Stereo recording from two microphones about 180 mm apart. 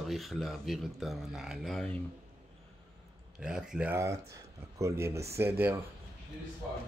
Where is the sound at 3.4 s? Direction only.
5° right (ahead or behind).